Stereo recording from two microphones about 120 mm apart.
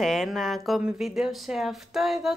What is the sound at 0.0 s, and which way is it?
A woman's voice, centre (ahead or behind).